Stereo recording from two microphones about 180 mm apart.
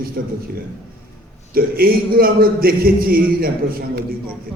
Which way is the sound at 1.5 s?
55° right (ahead or behind).